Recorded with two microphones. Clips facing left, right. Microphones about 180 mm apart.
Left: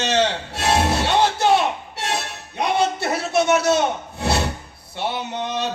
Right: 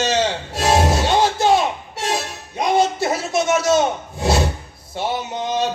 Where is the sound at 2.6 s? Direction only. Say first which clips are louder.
Right 3 dB; 65° left (ahead or behind).